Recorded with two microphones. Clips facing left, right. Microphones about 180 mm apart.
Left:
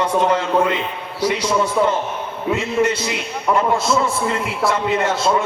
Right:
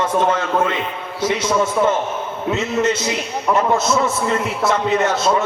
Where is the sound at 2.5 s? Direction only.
20° right (ahead or behind).